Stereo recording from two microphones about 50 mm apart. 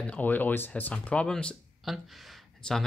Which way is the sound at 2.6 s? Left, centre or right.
Centre.